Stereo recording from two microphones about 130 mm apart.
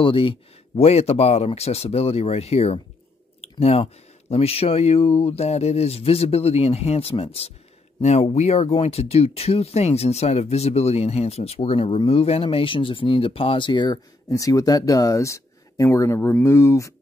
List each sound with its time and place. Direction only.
0.0 s speech: 45° left (ahead or behind)
14.3 s speech: 25° left (ahead or behind)